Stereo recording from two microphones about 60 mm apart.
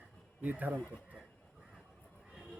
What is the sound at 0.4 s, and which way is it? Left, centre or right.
Speech, right.